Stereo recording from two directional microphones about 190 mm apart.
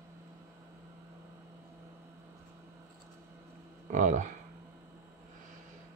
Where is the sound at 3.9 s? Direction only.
40° right (ahead or behind).